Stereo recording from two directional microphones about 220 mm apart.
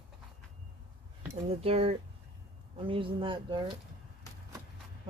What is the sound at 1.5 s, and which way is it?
Speech, 25° right (ahead or behind).